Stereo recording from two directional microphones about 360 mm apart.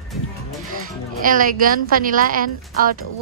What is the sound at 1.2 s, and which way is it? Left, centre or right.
Speech, right.